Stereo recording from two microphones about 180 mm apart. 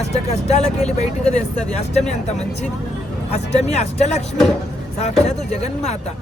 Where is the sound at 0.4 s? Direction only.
40° left (ahead or behind).